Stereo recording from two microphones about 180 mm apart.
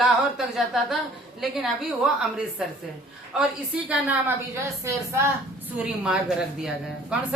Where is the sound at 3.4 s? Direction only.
5° right (ahead or behind).